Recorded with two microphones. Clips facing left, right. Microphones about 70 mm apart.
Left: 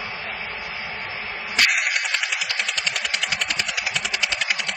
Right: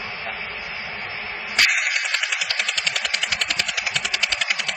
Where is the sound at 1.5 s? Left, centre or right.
Centre.